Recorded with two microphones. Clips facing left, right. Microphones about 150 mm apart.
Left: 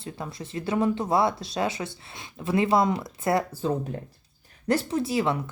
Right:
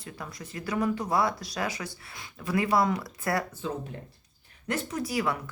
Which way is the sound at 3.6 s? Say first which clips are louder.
Left 7 dB; 40° left (ahead or behind).